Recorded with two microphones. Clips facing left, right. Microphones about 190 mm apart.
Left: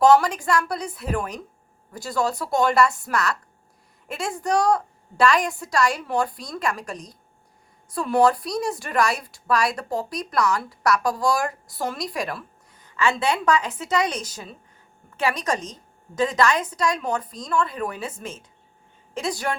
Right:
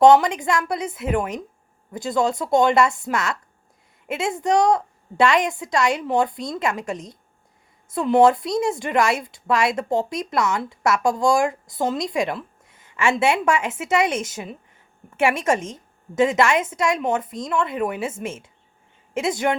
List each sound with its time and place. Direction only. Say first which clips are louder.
0.0 s a woman's voice: right 3 dB; 20° right (ahead or behind)